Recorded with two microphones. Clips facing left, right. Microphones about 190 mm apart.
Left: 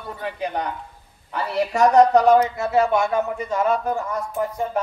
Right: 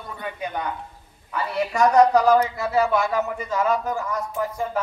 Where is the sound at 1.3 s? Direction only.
30° left (ahead or behind).